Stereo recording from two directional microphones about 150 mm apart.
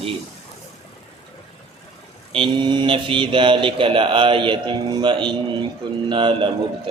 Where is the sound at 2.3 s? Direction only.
30° right (ahead or behind).